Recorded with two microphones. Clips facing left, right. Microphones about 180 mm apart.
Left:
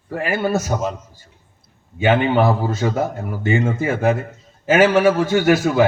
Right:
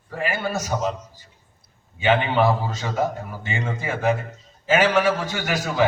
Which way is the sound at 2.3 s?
50° left (ahead or behind).